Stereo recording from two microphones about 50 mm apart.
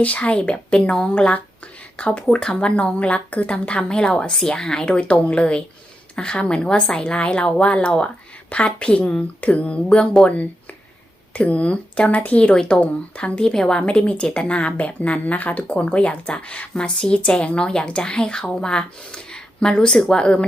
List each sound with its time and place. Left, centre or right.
0.0 s speech: left
1.3 s a sound: left
2.3 s speech: centre
3.8 s a woman's voice: centre
12.5 s a woman's voice: centre